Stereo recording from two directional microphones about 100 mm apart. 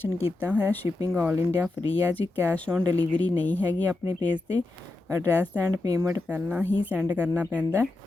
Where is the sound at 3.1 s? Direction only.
15° left (ahead or behind).